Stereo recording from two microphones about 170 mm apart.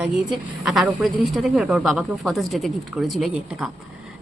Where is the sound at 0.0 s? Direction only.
5° right (ahead or behind).